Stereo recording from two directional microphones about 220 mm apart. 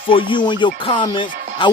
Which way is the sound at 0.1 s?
20° left (ahead or behind).